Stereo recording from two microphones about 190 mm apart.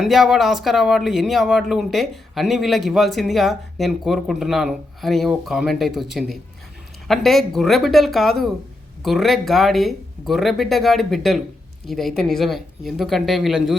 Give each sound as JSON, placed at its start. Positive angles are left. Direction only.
{"t": 0.0, "sound": "speech", "side_deg": 0}